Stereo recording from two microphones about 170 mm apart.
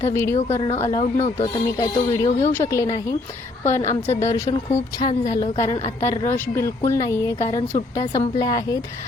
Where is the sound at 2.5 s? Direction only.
15° left (ahead or behind).